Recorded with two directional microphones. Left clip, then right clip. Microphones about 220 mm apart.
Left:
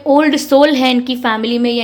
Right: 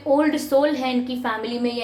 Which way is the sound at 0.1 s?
40° left (ahead or behind).